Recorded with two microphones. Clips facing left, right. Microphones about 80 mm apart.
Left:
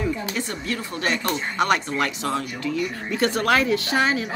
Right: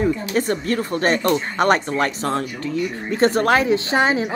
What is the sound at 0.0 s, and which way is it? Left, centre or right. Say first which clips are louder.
Speech: right 6 dB; right.